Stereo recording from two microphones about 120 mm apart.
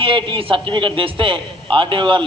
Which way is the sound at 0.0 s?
50° right (ahead or behind).